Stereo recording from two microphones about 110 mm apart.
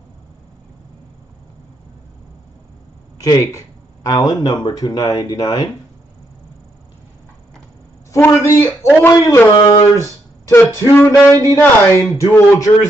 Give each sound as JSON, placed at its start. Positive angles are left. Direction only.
{"t": 3.2, "sound": "speech", "side_deg": 30}
{"t": 8.2, "sound": "speech", "side_deg": 25}